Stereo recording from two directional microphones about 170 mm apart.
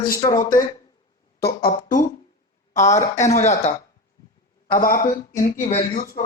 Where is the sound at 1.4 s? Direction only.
70° left (ahead or behind).